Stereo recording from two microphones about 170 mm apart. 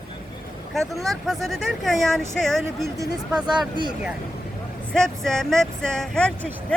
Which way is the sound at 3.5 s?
25° right (ahead or behind).